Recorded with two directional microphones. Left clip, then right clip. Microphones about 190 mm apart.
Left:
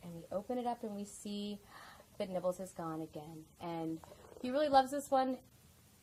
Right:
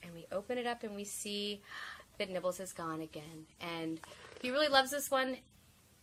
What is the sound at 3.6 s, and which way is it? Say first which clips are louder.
Speech: right 1 dB; 50° right (ahead or behind).